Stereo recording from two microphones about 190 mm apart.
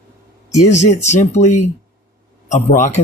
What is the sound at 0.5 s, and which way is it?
Speech, 35° left (ahead or behind).